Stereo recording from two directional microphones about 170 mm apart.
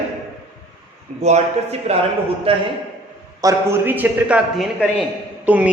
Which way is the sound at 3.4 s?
15° right (ahead or behind).